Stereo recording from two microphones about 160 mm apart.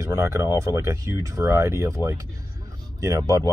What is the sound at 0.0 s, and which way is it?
Speech, 20° right (ahead or behind).